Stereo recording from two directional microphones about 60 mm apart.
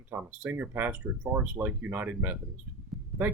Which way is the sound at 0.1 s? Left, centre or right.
Right.